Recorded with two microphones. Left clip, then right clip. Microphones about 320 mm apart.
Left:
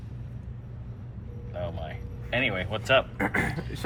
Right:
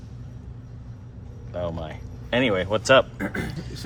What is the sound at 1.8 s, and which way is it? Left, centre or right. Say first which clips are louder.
Speech: right 3 dB; right.